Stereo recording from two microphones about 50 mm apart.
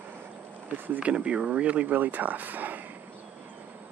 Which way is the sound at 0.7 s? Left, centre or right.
Right.